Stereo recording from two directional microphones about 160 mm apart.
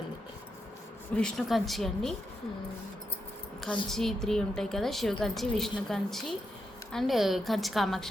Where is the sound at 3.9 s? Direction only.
Centre (ahead or behind).